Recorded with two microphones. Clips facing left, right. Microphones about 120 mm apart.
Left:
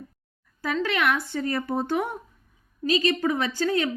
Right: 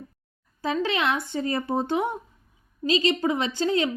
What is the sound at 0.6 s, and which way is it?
A woman's voice, 20° right (ahead or behind).